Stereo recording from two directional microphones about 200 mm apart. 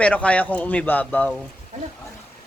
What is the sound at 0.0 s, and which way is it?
Speech, 5° left (ahead or behind).